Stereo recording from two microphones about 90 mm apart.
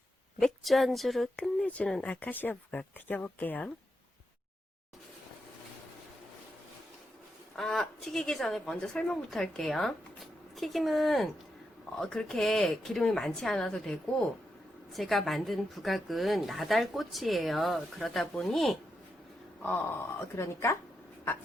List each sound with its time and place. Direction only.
0.3 s a woman's voice: 5° left (ahead or behind)
2.0 s speech: 15° left (ahead or behind)
7.5 s a woman's voice: 5° left (ahead or behind)
19.6 s speech: 20° left (ahead or behind)